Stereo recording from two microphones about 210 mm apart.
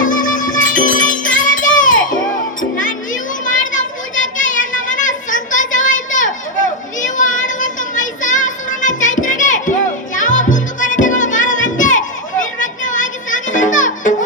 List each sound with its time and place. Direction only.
0.0 s music: 40° left (ahead or behind)
7.0 s child singing: 35° left (ahead or behind)
10.2 s music: 35° left (ahead or behind)